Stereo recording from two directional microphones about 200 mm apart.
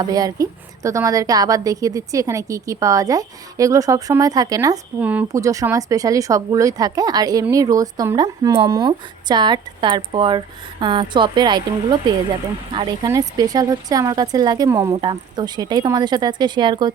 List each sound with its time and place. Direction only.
0.0 s a woman's voice: 20° right (ahead or behind)